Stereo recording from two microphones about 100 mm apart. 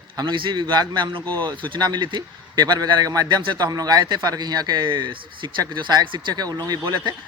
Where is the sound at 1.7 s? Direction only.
50° right (ahead or behind).